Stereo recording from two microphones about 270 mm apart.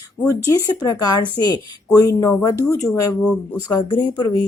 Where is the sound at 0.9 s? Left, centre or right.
Centre.